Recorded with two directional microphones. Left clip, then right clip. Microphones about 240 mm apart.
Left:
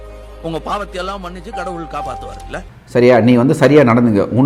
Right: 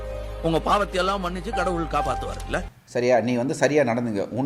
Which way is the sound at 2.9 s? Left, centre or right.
Left.